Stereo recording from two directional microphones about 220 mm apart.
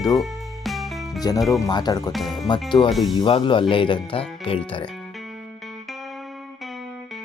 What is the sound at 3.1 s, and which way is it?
Speech, 25° left (ahead or behind).